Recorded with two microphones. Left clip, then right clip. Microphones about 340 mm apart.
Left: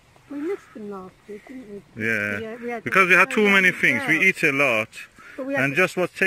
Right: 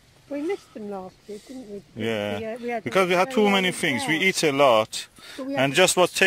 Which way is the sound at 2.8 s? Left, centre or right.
Centre.